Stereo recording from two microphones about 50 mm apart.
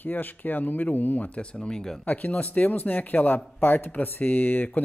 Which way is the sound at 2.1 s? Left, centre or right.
Left.